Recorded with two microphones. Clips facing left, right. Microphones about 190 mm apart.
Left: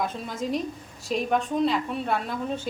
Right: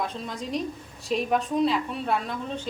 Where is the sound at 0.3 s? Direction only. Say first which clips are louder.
Left 2 dB; 5° left (ahead or behind).